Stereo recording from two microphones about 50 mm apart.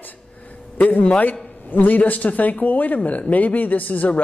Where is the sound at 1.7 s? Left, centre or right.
Left.